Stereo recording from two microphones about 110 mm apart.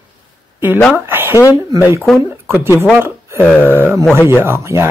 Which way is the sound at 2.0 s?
Centre (ahead or behind).